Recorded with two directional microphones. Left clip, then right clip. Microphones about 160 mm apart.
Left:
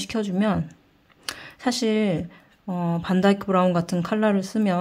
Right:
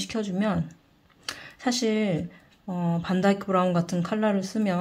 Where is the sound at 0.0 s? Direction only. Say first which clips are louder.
Left 3 dB; 30° left (ahead or behind).